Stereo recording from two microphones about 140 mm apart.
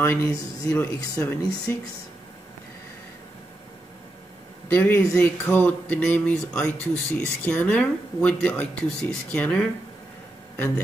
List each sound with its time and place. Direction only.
0.0 s speech: 15° left (ahead or behind)
4.7 s speech: 15° left (ahead or behind)